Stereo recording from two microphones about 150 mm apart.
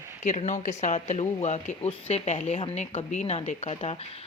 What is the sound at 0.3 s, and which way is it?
Speech, 50° left (ahead or behind).